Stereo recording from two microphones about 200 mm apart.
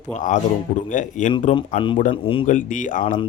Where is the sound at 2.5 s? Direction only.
40° left (ahead or behind).